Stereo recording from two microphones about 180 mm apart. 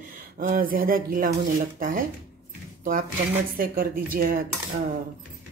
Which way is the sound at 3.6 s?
55° right (ahead or behind).